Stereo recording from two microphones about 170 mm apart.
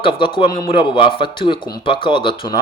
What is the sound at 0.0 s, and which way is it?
Speech, 30° left (ahead or behind).